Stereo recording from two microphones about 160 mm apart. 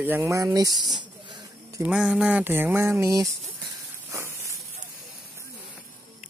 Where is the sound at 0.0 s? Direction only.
15° right (ahead or behind).